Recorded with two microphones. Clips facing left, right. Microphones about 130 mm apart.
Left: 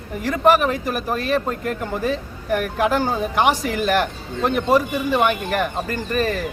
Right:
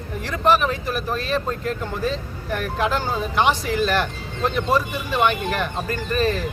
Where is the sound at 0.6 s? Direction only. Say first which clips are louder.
Left 2 dB; 45° left (ahead or behind).